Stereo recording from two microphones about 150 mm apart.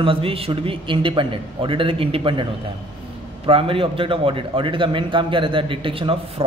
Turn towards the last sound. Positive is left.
turn(degrees=-35)  # may be behind; listen again after turning